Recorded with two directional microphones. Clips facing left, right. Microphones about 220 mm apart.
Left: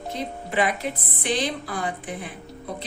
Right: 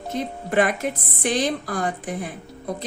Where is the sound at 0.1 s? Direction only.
50° right (ahead or behind).